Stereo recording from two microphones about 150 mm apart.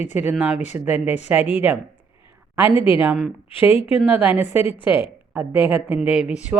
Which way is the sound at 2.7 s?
35° left (ahead or behind).